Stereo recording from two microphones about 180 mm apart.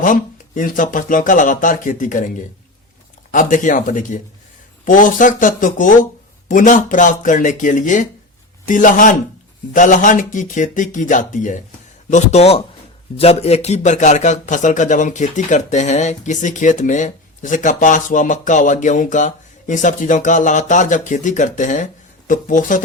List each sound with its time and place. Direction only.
0.0 s a man's voice: 45° left (ahead or behind)